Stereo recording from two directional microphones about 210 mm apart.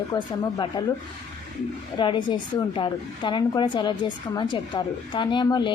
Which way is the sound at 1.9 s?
20° left (ahead or behind).